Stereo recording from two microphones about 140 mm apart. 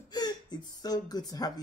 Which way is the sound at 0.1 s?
30° left (ahead or behind).